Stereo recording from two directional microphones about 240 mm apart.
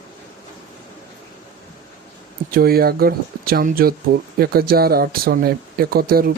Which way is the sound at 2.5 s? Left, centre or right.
Right.